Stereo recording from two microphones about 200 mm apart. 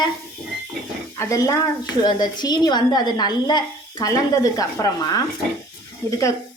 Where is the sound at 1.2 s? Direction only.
15° left (ahead or behind).